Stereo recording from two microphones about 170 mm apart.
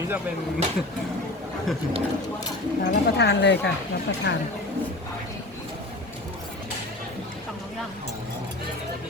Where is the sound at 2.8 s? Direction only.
80° left.